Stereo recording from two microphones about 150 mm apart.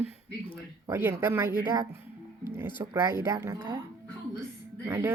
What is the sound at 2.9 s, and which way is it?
Speech, 15° right (ahead or behind).